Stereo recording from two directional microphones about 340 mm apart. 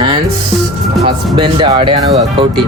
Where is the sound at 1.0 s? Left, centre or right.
Centre.